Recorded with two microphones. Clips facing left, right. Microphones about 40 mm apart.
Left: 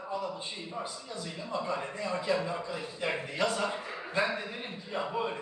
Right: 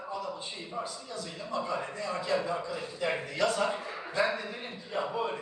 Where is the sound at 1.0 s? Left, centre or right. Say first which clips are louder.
Even; left.